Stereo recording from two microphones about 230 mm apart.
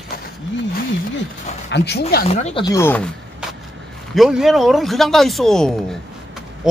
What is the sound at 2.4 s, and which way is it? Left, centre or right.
Speech, left.